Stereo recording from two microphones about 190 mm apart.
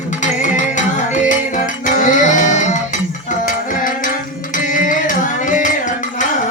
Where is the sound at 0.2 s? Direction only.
40° left (ahead or behind).